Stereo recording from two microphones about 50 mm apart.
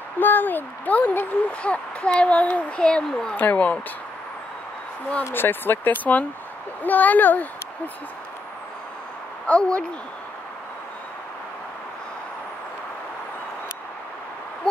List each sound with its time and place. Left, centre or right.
0.2 s speech: left; by 3.3 s centre
3.3 s speech: left
5.2 s a woman's voice: left
9.5 s speech: left